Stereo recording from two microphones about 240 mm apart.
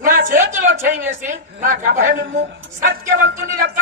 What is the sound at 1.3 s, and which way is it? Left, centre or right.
A woman's voice, right.